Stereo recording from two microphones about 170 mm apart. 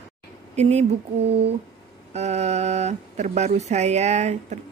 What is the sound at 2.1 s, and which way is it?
Speech, 40° right (ahead or behind).